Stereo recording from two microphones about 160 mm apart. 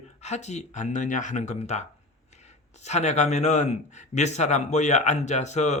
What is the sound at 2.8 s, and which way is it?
A man's voice, 45° left (ahead or behind).